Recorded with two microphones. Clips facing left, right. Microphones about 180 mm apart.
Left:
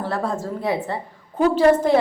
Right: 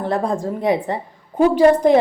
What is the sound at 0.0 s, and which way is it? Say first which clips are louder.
A woman's voice: right 4 dB; 15° right (ahead or behind).